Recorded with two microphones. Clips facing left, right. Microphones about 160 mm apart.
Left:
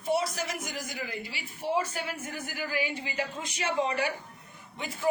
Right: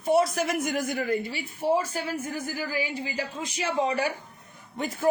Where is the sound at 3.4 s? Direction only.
35° right (ahead or behind).